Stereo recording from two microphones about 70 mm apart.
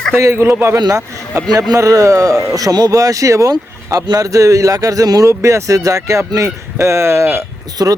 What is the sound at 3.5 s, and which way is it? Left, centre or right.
Speech, right.